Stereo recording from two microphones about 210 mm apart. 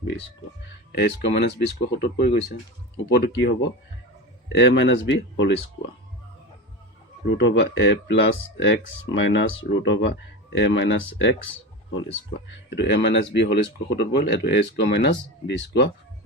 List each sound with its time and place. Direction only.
0.9 s speech: 50° left (ahead or behind)
7.3 s speech: 60° left (ahead or behind)
12.5 s speech: 55° left (ahead or behind)